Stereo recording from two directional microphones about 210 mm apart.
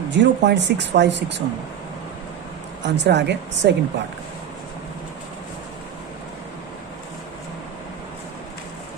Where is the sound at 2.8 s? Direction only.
55° right (ahead or behind).